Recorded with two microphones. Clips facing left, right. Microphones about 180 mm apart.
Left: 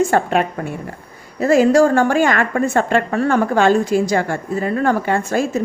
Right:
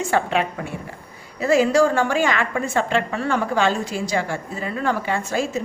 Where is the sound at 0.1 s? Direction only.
45° left (ahead or behind).